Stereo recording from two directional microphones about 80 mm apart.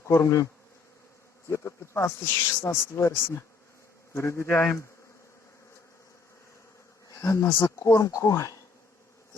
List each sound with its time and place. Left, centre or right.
0.1 s speech: left
1.5 s speech: left
4.5 s bee: centre
7.1 s speech: left